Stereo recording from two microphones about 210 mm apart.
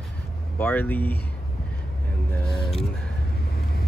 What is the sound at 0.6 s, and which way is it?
Speech, 10° left (ahead or behind).